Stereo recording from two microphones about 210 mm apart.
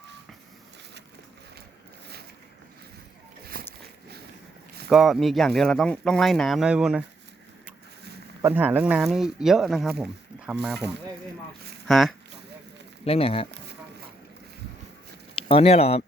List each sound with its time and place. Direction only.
3.6 s a sound: 45° right (ahead or behind)
4.9 s speech: centre (ahead or behind)
8.4 s speech: 10° right (ahead or behind)
11.9 s speech: centre (ahead or behind)
13.1 s speech: 25° left (ahead or behind)
15.4 s speech: 25° left (ahead or behind)